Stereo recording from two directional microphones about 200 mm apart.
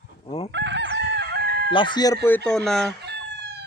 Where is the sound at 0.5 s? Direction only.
65° right (ahead or behind).